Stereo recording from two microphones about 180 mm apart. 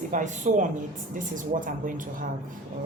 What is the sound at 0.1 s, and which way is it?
A woman's voice, 45° right (ahead or behind).